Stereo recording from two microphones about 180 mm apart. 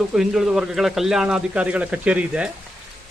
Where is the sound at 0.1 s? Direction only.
Centre (ahead or behind).